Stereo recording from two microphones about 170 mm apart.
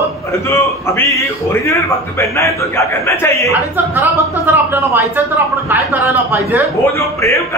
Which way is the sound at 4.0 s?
10° right (ahead or behind).